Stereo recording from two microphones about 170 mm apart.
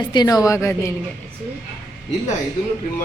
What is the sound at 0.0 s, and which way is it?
Speech, 25° left (ahead or behind).